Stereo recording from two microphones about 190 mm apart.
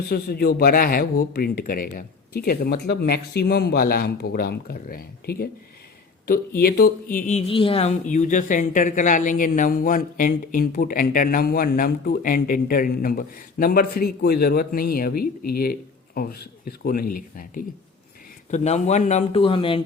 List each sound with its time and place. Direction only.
0.1 s speech: 55° left (ahead or behind)
6.6 s speech: 50° left (ahead or behind)
18.5 s speech: 35° left (ahead or behind)